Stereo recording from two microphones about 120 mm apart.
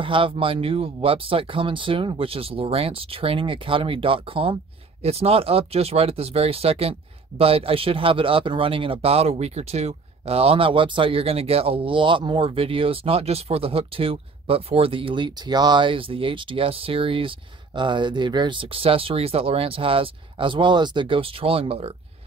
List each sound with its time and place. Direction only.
0.0 s speech: 45° right (ahead or behind)
5.0 s speech: 60° right (ahead or behind)